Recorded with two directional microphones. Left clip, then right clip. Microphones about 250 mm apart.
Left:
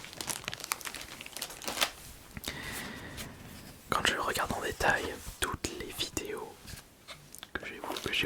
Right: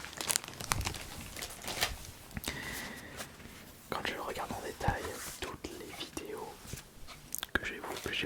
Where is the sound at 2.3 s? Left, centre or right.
Centre.